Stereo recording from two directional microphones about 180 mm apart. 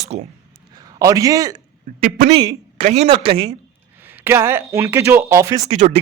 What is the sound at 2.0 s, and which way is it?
Speech, 45° right (ahead or behind).